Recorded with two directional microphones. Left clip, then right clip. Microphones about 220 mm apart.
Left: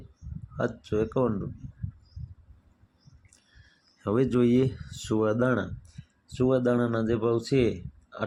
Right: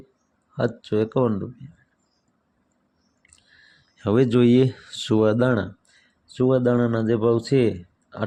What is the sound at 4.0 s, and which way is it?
Speech, 30° right (ahead or behind).